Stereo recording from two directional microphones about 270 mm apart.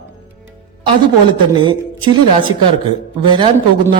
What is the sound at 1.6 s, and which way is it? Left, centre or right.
A woman's voice, centre.